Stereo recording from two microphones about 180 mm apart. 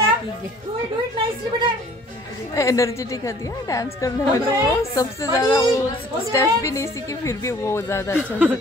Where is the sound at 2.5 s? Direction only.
15° left (ahead or behind).